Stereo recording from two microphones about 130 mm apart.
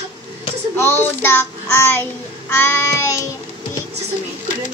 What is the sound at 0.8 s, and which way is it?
Child singing, 15° left (ahead or behind).